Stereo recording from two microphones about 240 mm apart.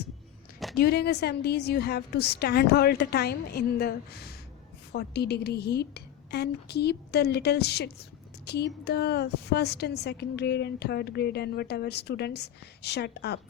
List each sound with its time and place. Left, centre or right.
0.8 s a woman's voice: left